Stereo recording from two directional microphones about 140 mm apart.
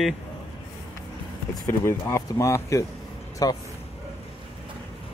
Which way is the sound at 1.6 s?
20° left (ahead or behind).